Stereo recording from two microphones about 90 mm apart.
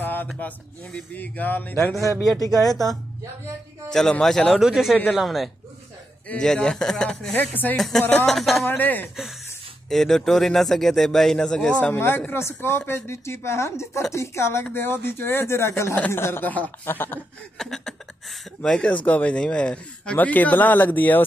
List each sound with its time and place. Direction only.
0.0 s a sound: 20° left (ahead or behind)
0.9 s speech: 20° left (ahead or behind)
3.9 s speech: 5° left (ahead or behind)
4.6 s speech: 5° right (ahead or behind)
6.2 s speech: 10° left (ahead or behind)
7.3 s speech: 20° left (ahead or behind)
7.7 s speech: 5° left (ahead or behind)
8.0 s speech: 20° left (ahead or behind)
8.3 s speech: centre (ahead or behind)
8.6 s speech: 20° left (ahead or behind)
9.8 s speech: 5° left (ahead or behind); by 17.2 s 20° left (ahead or behind)
17.6 s speech: 5° left (ahead or behind); by 21.2 s 20° left (ahead or behind)